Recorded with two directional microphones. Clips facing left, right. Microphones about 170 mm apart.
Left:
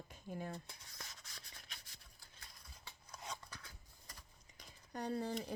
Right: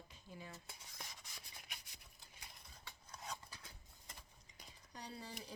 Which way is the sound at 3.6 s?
20° right (ahead or behind).